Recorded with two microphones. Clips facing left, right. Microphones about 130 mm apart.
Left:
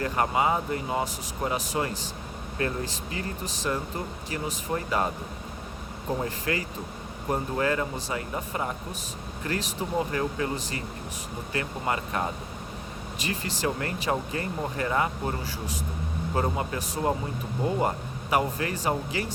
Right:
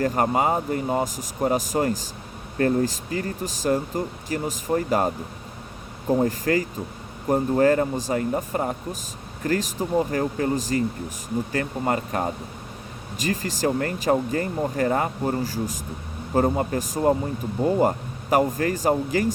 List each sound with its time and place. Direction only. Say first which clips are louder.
0.0 s speech: right 4 dB; 45° right (ahead or behind)
6.2 s speech: right 7 dB; 40° right (ahead or behind)